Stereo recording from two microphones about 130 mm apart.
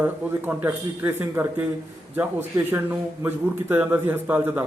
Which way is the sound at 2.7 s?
15° right (ahead or behind).